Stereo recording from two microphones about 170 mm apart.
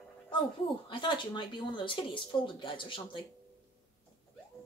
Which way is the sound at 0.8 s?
30° left (ahead or behind).